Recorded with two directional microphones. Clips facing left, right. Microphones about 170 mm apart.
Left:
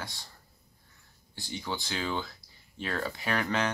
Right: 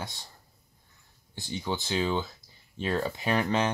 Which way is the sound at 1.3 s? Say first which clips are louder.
Right 4 dB; 20° right (ahead or behind).